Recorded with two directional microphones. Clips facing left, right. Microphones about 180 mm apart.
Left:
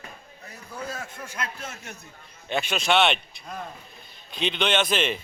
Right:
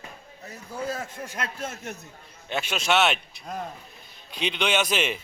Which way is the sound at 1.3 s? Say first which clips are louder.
Right 1 dB; 40° right (ahead or behind).